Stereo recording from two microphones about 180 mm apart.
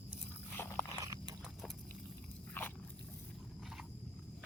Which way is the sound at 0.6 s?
15° left (ahead or behind).